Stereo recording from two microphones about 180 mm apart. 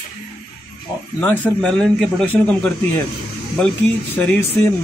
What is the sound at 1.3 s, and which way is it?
Speech, 5° left (ahead or behind).